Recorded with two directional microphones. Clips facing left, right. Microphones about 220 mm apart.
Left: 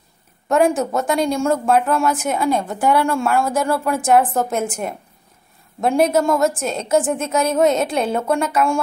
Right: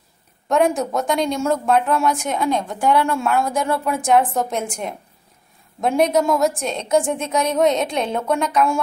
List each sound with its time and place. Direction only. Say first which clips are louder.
0.5 s a woman's voice: left 2 dB; centre (ahead or behind)